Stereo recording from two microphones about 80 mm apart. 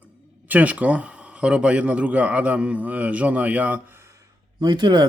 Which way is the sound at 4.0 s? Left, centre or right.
Right.